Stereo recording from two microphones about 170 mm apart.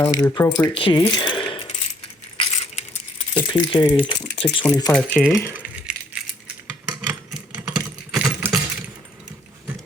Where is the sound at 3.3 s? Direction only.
30° left (ahead or behind).